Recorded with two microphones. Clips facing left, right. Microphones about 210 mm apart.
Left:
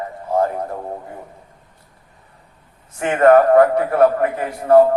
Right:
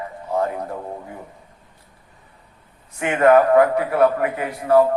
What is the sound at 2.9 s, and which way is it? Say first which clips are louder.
A man's voice: left 2 dB; 45° left (ahead or behind).